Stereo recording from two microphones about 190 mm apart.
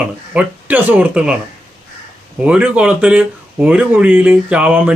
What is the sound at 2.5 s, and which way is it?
Speech, 5° right (ahead or behind).